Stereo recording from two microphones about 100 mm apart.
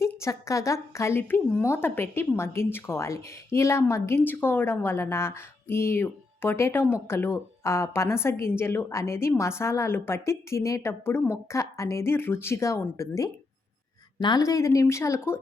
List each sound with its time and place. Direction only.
0.2 s a woman's voice: 30° left (ahead or behind)
14.2 s speech: 50° left (ahead or behind)
14.4 s a woman's voice: 35° left (ahead or behind)